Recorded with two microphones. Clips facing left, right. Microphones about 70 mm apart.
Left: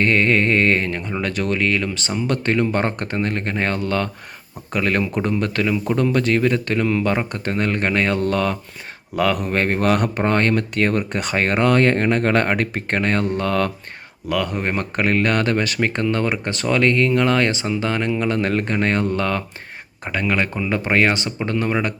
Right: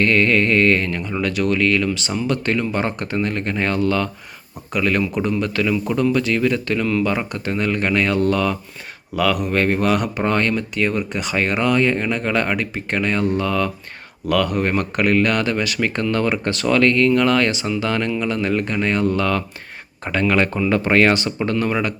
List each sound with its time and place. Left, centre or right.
0.0 s speech: left
2.2 s speech: left
14.3 s speech: left
15.9 s speech: left
18.3 s speech: left
20.1 s speech: centre